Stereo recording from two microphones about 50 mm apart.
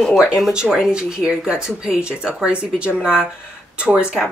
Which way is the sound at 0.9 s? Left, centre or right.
Centre.